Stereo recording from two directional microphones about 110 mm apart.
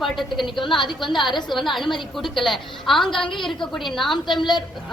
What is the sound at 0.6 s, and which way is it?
Speech, 45° left (ahead or behind).